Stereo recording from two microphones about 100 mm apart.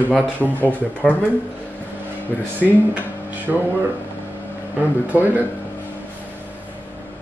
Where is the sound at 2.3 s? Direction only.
20° left (ahead or behind).